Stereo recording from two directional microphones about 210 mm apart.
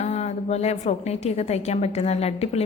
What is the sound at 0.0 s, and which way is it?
A woman's voice, 30° left (ahead or behind).